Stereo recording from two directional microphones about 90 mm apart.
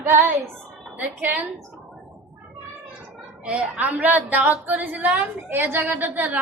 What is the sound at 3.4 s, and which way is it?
A woman's voice, 10° right (ahead or behind).